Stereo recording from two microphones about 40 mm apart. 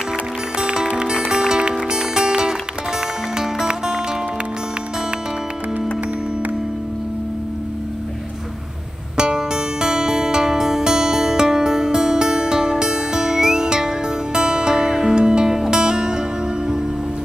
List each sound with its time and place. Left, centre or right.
0.6 s music: centre
9.1 s music: centre